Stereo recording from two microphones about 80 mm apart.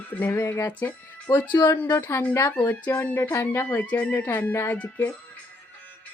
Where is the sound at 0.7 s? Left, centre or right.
Left.